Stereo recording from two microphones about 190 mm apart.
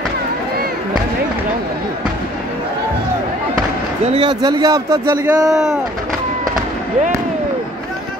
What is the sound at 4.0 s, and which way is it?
Speech, 30° right (ahead or behind).